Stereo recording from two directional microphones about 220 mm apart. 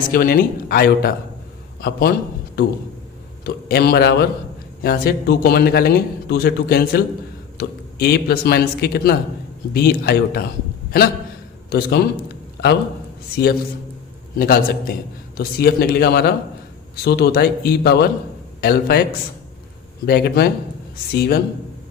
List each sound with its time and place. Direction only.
0.1 s a man's voice: 40° left (ahead or behind)
3.4 s a man's voice: 45° left (ahead or behind)
11.7 s a man's voice: 45° left (ahead or behind)
13.3 s a man's voice: 45° left (ahead or behind)
20.1 s a man's voice: 45° left (ahead or behind)